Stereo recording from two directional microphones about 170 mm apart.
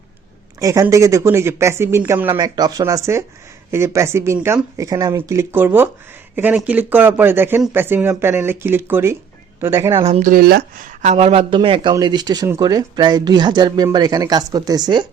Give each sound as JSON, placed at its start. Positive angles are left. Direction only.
{"t": 0.6, "sound": "speech", "side_deg": -20}
{"t": 10.2, "sound": "speech", "side_deg": -55}